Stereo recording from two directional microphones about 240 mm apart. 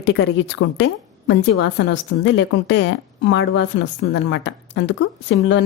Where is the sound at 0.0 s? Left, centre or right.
Left.